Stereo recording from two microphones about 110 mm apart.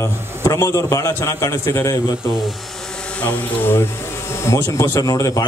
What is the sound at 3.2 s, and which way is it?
A man's voice, 15° left (ahead or behind).